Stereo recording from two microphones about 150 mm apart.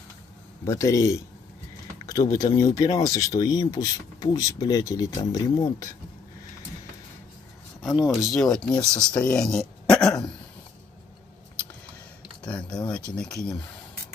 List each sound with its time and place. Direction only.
0.7 s speech: 20° left (ahead or behind)
7.8 s speech: 5° right (ahead or behind)
12.4 s speech: 5° left (ahead or behind)